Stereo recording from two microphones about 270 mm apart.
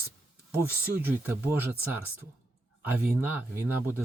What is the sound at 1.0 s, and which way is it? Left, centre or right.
Speech, centre.